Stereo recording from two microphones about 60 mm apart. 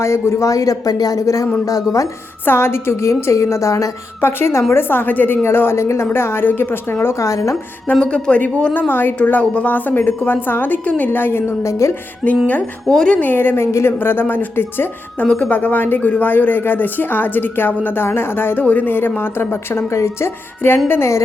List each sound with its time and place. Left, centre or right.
0.0 s speech: left
2.4 s a woman's voice: left
4.2 s speech: left
7.0 s a woman's voice: left
7.9 s a man's voice: centre
8.9 s speech: left
9.1 s a man's voice: left
11.6 s a woman's voice: left
12.9 s speech: centre
13.1 s speech: left
15.2 s speech: left